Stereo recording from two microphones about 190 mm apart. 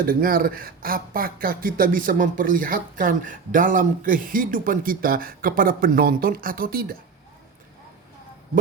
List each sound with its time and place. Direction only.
0.0 s a man's voice: 50° right (ahead or behind)